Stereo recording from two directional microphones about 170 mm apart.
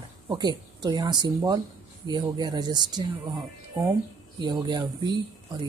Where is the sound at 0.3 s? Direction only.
25° right (ahead or behind).